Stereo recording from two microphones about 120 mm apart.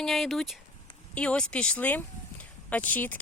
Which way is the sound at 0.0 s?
Centre (ahead or behind).